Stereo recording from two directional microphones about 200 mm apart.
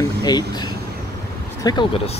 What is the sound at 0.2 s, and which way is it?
Speech, 20° left (ahead or behind).